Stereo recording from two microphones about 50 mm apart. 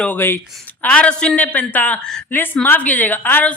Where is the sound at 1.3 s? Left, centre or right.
Left.